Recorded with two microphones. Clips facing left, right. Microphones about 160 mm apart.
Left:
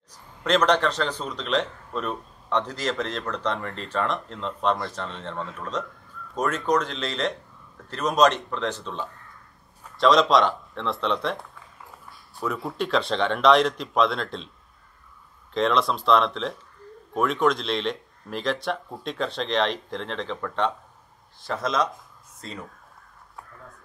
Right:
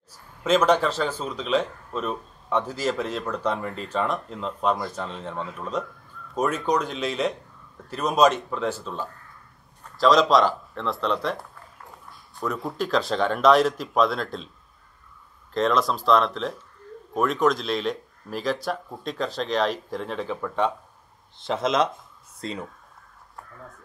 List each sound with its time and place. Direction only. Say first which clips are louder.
0.4 s speech: right 1 dB; 5° right (ahead or behind)
15.5 s speech: even; centre (ahead or behind)
21.5 s speech: right 3 dB; 25° right (ahead or behind)